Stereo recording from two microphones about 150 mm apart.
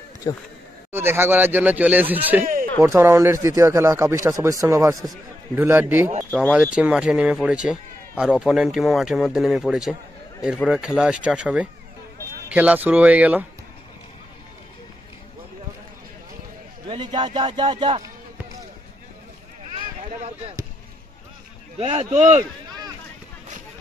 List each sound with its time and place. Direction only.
0.3 s speech: 25° left (ahead or behind)
0.9 s speech: 15° right (ahead or behind)
16.8 s a man's voice: 30° right (ahead or behind)
21.7 s speech: 45° right (ahead or behind)